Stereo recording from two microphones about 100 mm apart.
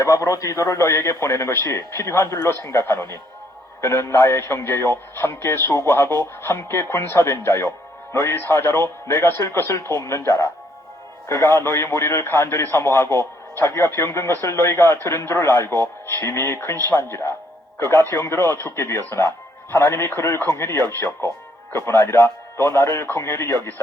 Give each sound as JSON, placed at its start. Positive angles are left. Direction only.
{"t": 0.0, "sound": "a man's voice", "side_deg": 30}